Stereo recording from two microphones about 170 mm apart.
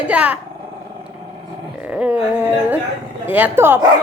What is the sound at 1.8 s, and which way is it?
Speech, 10° right (ahead or behind).